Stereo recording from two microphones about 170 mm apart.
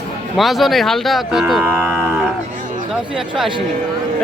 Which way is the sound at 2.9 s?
Centre (ahead or behind).